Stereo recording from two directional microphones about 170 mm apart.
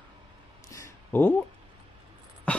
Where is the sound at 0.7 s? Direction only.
10° left (ahead or behind).